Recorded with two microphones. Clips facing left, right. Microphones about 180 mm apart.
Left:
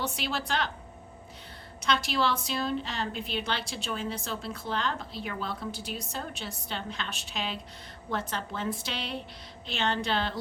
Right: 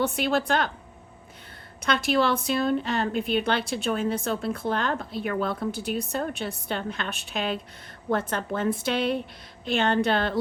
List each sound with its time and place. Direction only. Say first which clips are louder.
0.0 s a woman's voice: right 9 dB; 55° right (ahead or behind)
1.8 s a woman's voice: right 5 dB; 55° right (ahead or behind)